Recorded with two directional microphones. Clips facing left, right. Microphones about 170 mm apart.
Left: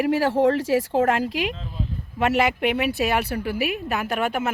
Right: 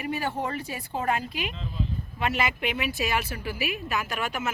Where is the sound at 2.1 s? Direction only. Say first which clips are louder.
Left 8 dB; 70° left (ahead or behind).